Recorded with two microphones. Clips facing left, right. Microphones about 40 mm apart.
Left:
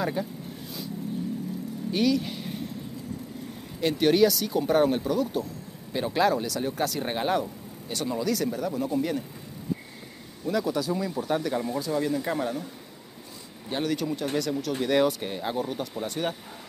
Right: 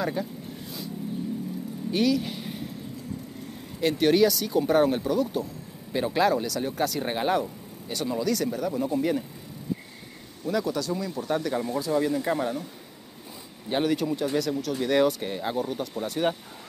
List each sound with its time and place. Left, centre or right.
0.0 s speech: centre
1.9 s speech: centre
3.8 s speech: centre
10.4 s speech: centre
13.7 s speech: centre
13.9 s speech: centre